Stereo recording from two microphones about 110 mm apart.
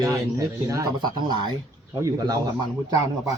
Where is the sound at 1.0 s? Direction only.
40° right (ahead or behind).